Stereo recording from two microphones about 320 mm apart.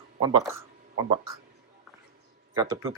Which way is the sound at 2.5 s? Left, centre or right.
Centre.